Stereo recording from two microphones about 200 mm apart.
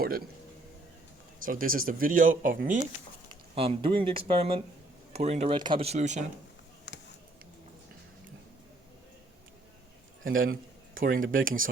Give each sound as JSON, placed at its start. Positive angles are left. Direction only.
{"t": 1.5, "sound": "speech", "side_deg": -45}
{"t": 3.5, "sound": "speech", "side_deg": -25}
{"t": 6.9, "sound": "a sound", "side_deg": 60}
{"t": 10.2, "sound": "speech", "side_deg": -45}